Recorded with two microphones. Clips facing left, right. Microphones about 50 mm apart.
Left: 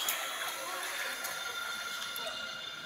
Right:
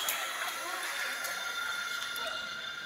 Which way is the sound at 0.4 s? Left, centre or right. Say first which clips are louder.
Right 2 dB; right.